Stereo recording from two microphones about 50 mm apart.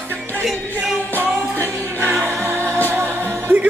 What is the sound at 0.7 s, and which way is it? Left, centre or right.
Music, left.